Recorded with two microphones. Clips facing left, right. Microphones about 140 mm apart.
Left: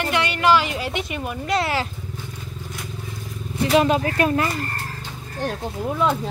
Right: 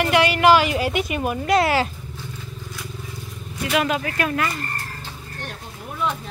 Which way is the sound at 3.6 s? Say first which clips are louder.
Left 4 dB; 30° left (ahead or behind).